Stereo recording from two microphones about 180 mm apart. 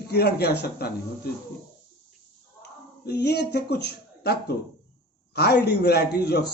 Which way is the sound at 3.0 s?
65° left (ahead or behind).